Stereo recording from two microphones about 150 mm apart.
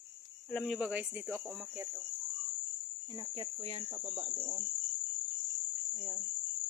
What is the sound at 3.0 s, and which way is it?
Cricket, 35° right (ahead or behind).